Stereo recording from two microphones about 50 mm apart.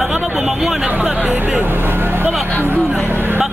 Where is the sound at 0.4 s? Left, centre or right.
Centre.